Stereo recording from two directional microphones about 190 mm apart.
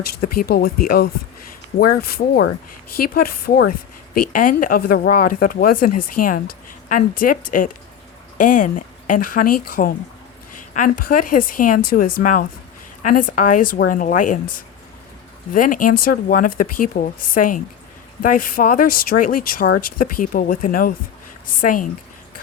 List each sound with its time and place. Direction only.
0.3 s a woman's voice: 55° left (ahead or behind)
15.5 s a woman's voice: 45° left (ahead or behind)